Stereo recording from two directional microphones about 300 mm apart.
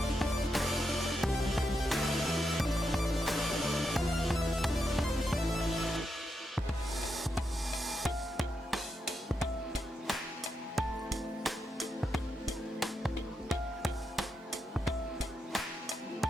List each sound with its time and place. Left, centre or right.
0.0 s music: centre
7.9 s music: centre